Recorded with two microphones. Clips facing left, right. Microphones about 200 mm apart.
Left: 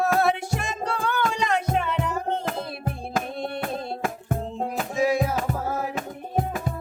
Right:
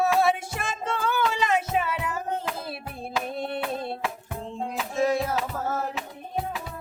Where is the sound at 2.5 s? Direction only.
50° left (ahead or behind).